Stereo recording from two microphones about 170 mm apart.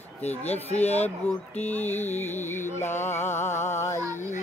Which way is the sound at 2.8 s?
40° left (ahead or behind).